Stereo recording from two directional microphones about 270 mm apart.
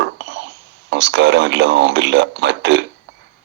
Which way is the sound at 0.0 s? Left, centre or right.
Right.